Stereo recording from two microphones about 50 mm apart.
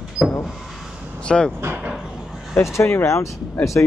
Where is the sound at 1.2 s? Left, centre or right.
Centre.